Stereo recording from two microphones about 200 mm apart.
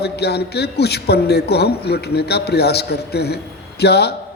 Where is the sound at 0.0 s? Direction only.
55° left (ahead or behind).